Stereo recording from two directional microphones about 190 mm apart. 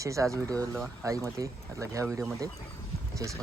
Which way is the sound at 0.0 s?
15° right (ahead or behind).